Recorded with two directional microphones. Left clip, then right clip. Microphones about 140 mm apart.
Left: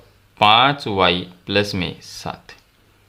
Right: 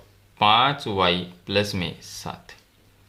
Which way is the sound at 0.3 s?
35° left (ahead or behind).